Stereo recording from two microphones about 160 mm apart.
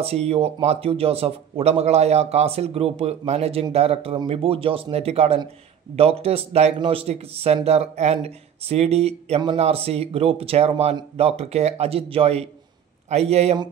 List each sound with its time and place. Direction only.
0.0 s speech: 40° right (ahead or behind)